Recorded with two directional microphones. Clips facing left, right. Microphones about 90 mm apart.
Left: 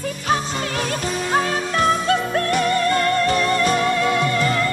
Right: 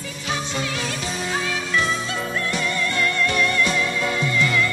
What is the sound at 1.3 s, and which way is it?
Music, 45° left (ahead or behind).